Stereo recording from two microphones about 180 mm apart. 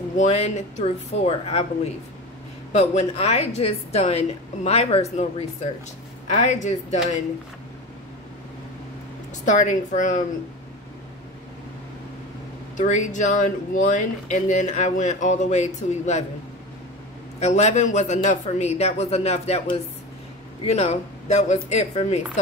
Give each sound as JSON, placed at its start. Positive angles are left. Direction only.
{"t": 0.2, "sound": "a woman's voice", "side_deg": 40}
{"t": 2.7, "sound": "a woman's voice", "side_deg": 40}
{"t": 6.2, "sound": "a woman's voice", "side_deg": 40}
{"t": 9.4, "sound": "speech", "side_deg": 45}
{"t": 12.7, "sound": "speech", "side_deg": 45}
{"t": 17.4, "sound": "a woman's voice", "side_deg": 40}